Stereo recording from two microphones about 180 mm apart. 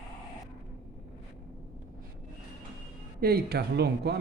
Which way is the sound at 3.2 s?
60° right (ahead or behind).